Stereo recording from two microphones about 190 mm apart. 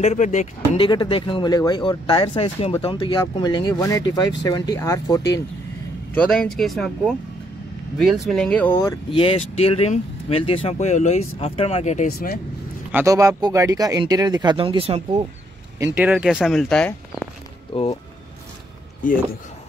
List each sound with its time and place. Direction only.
0.0 s speech: 40° left (ahead or behind)
0.7 s speech: 25° left (ahead or behind)
6.2 s speech: 5° left (ahead or behind)
9.1 s speech: 30° left (ahead or behind)
12.1 s speech: 50° left (ahead or behind)
12.9 s speech: 15° right (ahead or behind)
15.8 s speech: 10° right (ahead or behind)
17.7 s speech: 30° left (ahead or behind)
19.0 s speech: 45° left (ahead or behind)